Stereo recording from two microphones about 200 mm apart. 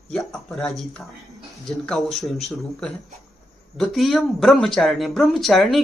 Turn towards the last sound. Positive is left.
turn(degrees=0)  # may be behind; listen again after turning